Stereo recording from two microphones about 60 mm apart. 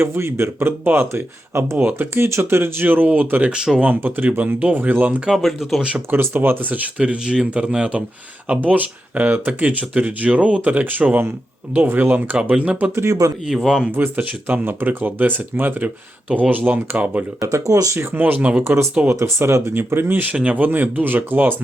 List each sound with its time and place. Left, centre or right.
0.0 s speech: right
3.5 s speech: centre
3.8 s speech: right
5.3 s speech: centre
6.1 s speech: right
12.4 s speech: right
13.5 s speech: centre
13.9 s speech: right
17.5 s speech: right
17.9 s speech: right
18.6 s speech: right
20.3 s speech: right